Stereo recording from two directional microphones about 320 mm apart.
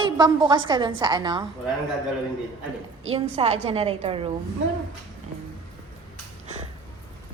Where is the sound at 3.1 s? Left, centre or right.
Centre.